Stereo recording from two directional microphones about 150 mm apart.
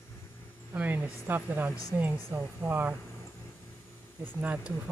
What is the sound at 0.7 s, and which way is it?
A woman's voice, 15° right (ahead or behind).